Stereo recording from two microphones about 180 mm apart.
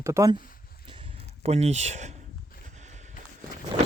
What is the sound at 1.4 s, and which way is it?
Speech, 35° right (ahead or behind).